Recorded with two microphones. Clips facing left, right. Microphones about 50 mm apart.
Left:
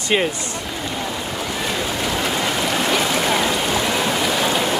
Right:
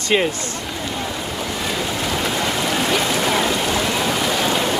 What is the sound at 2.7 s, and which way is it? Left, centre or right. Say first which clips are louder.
Stream: even; centre.